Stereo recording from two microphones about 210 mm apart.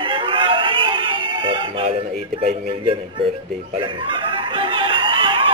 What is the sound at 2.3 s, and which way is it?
Speech, 25° right (ahead or behind).